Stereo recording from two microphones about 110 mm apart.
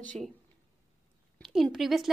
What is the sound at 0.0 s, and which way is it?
Speech, 10° left (ahead or behind).